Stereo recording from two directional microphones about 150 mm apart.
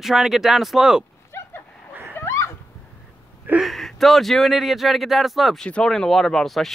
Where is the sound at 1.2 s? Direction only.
15° left (ahead or behind).